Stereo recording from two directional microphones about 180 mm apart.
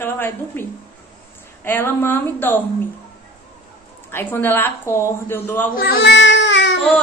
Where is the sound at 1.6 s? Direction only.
10° left (ahead or behind).